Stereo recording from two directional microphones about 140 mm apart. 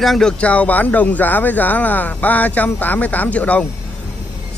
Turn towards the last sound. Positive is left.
turn(degrees=10)  # may be behind; listen again after turning